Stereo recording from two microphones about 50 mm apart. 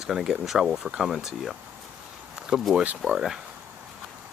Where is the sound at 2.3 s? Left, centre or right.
Centre.